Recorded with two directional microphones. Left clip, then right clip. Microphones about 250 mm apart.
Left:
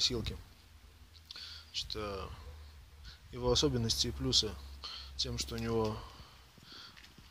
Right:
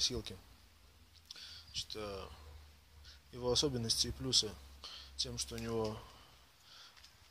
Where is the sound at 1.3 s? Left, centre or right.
Centre.